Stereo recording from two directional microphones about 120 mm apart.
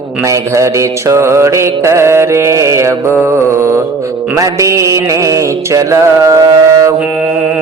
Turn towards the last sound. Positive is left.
turn(degrees=-30)  # may be behind; listen again after turning